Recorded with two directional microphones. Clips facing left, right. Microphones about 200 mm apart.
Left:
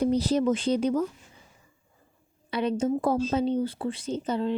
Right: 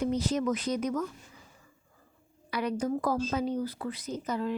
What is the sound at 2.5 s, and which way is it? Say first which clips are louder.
Speech: left 4 dB; 25° left (ahead or behind).